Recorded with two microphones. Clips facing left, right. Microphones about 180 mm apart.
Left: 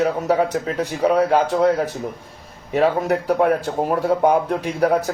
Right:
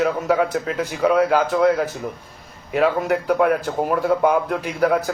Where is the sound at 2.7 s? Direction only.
40° left (ahead or behind).